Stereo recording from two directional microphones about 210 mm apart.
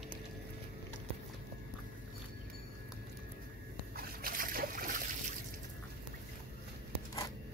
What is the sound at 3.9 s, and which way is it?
Trickle, 45° right (ahead or behind).